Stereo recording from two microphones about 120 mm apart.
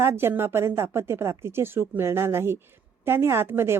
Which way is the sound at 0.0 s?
20° right (ahead or behind).